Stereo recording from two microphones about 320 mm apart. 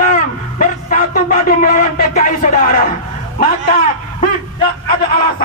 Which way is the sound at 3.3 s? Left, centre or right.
Left.